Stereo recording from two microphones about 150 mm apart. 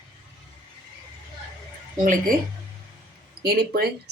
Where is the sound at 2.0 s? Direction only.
65° right (ahead or behind).